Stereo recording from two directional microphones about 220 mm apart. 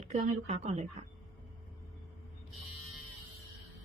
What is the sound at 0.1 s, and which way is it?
Speech, 30° right (ahead or behind).